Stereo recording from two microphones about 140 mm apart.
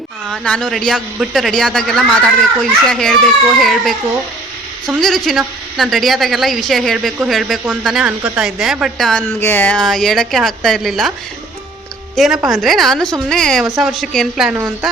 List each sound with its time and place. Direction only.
0.3 s a man's voice: 5° left (ahead or behind)
4.9 s a man's voice: centre (ahead or behind)
9.4 s a man's voice: 15° left (ahead or behind)
12.1 s a woman's voice: centre (ahead or behind)
14.5 s speech: 15° right (ahead or behind)